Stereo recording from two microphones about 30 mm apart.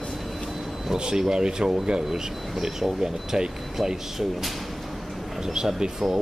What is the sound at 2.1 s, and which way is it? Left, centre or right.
Speech, centre.